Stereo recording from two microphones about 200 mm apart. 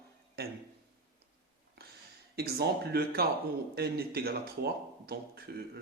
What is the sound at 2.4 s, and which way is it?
Speech, 55° right (ahead or behind).